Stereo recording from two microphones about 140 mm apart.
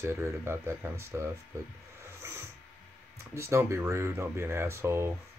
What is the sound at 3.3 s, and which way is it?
Speech, 20° right (ahead or behind).